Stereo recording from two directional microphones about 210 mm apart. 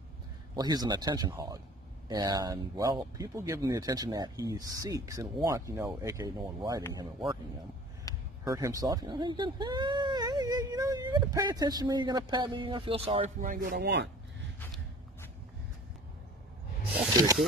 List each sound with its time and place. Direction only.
0.6 s speech: 20° right (ahead or behind)
13.5 s speech: 40° right (ahead or behind)
17.1 s speech: 15° right (ahead or behind)